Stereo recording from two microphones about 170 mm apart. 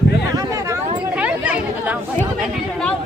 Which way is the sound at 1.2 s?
10° right (ahead or behind).